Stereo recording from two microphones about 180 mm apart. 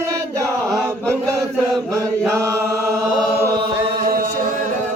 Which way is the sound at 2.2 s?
15° right (ahead or behind).